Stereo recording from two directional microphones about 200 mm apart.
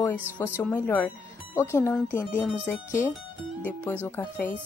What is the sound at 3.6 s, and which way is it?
Speech, 10° left (ahead or behind).